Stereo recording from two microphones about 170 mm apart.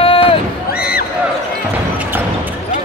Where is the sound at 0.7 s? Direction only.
65° left (ahead or behind).